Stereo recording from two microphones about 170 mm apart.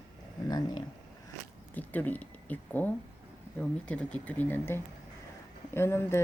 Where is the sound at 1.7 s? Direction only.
10° left (ahead or behind).